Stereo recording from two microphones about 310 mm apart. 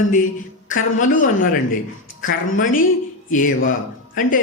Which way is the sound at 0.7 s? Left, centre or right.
Left.